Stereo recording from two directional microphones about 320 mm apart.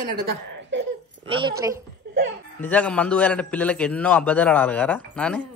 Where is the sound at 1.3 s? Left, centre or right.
Centre.